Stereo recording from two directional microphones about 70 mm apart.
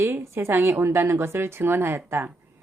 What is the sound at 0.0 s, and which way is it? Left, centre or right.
A woman's voice, right.